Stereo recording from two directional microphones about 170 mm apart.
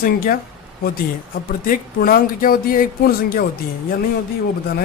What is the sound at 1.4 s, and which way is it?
Speech, 60° left (ahead or behind).